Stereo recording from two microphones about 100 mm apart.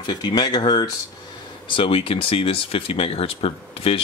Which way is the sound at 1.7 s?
65° left (ahead or behind).